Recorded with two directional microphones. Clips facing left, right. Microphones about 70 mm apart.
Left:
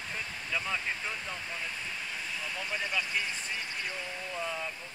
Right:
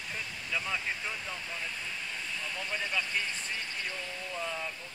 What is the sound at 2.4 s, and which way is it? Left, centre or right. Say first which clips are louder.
Speech: even; centre.